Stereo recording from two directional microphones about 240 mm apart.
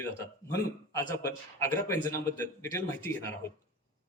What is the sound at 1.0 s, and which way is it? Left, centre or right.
A man's voice, centre.